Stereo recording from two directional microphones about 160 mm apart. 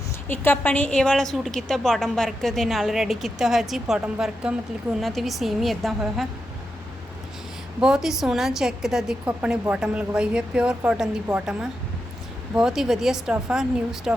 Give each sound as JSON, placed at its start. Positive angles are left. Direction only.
{"t": 0.3, "sound": "a woman's voice", "side_deg": 10}
{"t": 7.8, "sound": "a woman's voice", "side_deg": -5}